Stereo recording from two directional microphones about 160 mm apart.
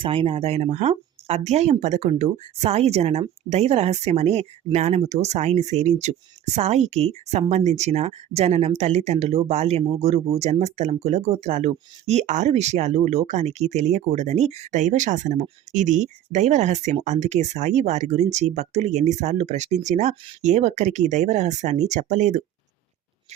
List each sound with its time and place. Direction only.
0.0 s speech: 35° right (ahead or behind)